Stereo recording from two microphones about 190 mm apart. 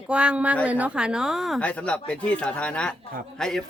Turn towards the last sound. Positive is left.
turn(degrees=5)  # may be behind; listen again after turning